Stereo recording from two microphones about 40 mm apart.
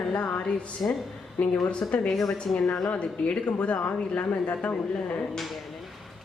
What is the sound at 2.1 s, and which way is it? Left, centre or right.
Speech, centre.